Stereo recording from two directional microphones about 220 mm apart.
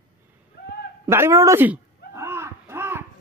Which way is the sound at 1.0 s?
10° right (ahead or behind).